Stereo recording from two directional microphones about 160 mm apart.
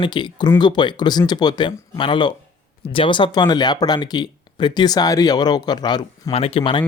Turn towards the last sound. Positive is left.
turn(degrees=35)  # may be behind; listen again after turning